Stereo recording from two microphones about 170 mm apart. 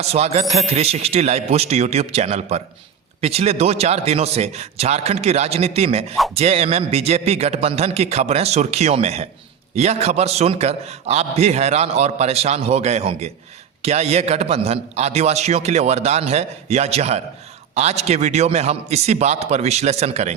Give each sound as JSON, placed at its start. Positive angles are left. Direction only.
{"t": 0.0, "sound": "a man's voice", "side_deg": -40}